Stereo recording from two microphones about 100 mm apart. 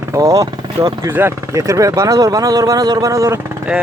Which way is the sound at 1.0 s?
20° right (ahead or behind).